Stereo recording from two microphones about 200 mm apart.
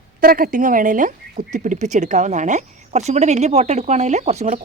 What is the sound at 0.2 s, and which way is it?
Speech, 45° right (ahead or behind).